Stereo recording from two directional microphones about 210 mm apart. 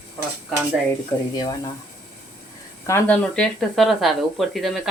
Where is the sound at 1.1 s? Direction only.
20° left (ahead or behind).